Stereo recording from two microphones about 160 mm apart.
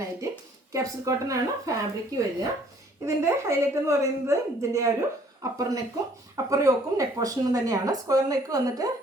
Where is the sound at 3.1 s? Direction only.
15° right (ahead or behind).